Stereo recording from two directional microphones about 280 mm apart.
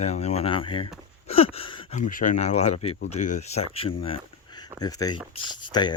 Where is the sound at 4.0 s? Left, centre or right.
Centre.